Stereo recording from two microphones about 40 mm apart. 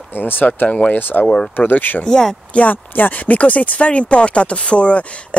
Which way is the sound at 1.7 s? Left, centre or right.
Left.